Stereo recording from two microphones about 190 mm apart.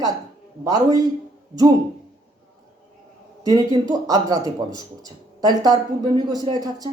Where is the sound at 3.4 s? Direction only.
20° right (ahead or behind).